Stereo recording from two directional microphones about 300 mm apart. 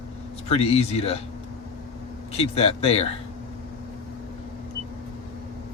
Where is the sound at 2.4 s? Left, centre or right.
Centre.